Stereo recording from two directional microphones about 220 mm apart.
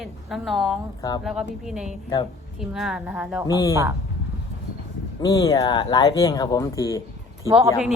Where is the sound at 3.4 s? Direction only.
15° left (ahead or behind).